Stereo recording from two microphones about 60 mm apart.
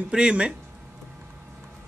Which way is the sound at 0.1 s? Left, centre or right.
Centre.